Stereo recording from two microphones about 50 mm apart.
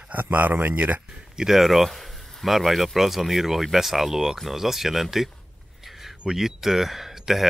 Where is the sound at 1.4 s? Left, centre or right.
Centre.